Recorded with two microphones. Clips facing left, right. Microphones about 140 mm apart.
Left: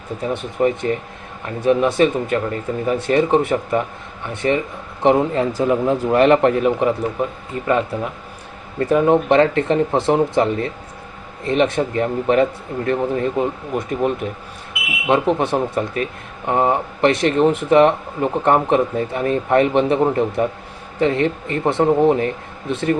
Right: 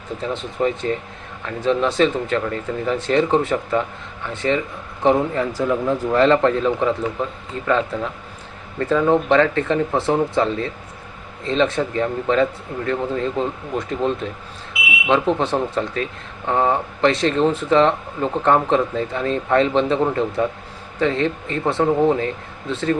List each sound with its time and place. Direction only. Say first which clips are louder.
0.2 s speech: left 3 dB; 15° left (ahead or behind)